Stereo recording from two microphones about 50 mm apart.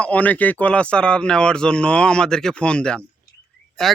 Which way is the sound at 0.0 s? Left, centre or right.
Left.